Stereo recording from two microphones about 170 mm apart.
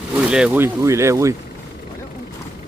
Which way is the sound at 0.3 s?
5° right (ahead or behind).